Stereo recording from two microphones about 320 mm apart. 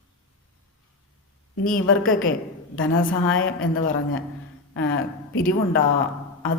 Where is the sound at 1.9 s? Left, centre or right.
Left.